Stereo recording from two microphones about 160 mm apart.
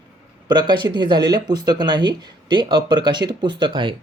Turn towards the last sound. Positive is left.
turn(degrees=-30)  # may be behind; listen again after turning